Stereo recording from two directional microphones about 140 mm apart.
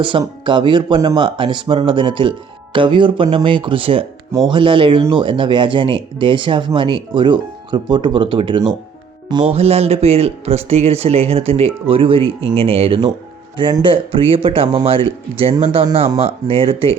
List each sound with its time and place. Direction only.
0.0 s speech: 35° right (ahead or behind)